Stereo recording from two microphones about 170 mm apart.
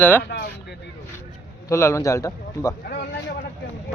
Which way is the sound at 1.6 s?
15° left (ahead or behind).